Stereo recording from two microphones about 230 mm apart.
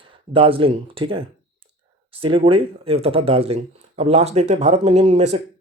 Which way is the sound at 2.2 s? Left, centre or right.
Right.